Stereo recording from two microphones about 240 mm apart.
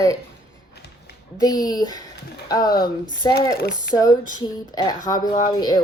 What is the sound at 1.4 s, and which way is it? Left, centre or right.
Speech, centre.